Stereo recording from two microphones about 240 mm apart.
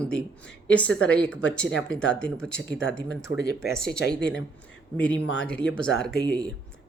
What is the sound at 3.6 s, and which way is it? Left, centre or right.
Speech, centre.